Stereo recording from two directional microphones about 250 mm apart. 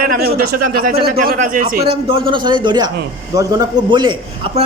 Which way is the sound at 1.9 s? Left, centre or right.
Right.